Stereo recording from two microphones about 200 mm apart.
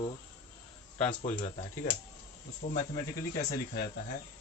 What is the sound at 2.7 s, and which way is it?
Speech, 55° left (ahead or behind).